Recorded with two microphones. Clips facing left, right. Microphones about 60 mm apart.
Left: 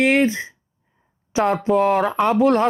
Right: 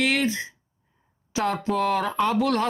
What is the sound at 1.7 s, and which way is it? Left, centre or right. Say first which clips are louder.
Speech: left 7 dB; centre.